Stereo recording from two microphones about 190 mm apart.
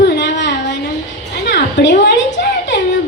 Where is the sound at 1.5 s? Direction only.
65° left (ahead or behind).